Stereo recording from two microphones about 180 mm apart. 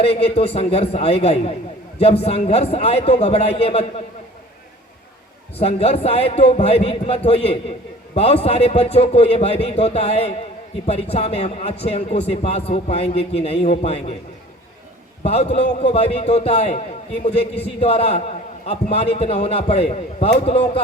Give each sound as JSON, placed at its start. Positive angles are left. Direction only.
{"t": 0.0, "sound": "speech", "side_deg": 35}
{"t": 5.5, "sound": "speech", "side_deg": 35}
{"t": 15.2, "sound": "speech", "side_deg": 35}
{"t": 17.4, "sound": "a man's voice", "side_deg": 70}
{"t": 17.7, "sound": "speech", "side_deg": 35}